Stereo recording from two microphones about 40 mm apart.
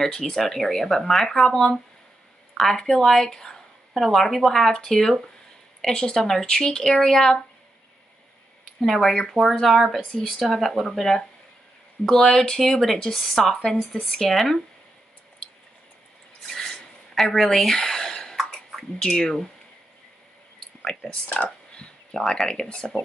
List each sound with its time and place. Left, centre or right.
0.0 s a woman's voice: centre
6.8 s a woman's voice: centre
8.8 s a woman's voice: centre
13.7 s speech: centre
16.4 s a sound: centre
17.9 s cough: centre
20.8 s a woman's voice: centre
22.4 s a woman's voice: centre